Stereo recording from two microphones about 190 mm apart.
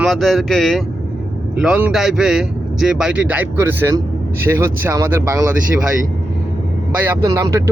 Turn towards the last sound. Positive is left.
turn(degrees=-15)  # may be behind; listen again after turning